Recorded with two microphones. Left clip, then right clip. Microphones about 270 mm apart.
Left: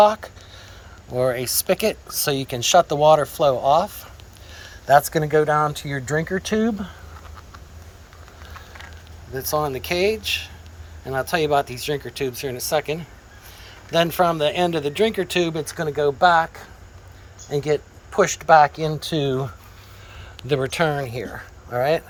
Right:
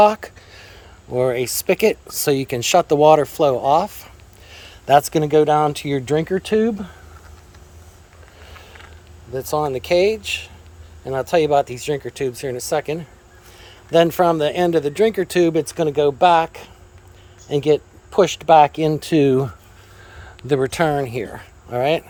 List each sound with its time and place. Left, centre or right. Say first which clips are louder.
0.0 s speech: right 2 dB; right
9.3 s speech: right 2 dB; right
20.1 s a sound: right 2 dB; right
20.5 s speech: right 3 dB; right